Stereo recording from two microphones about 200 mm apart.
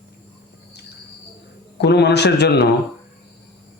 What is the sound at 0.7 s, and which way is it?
Insect, 55° left (ahead or behind).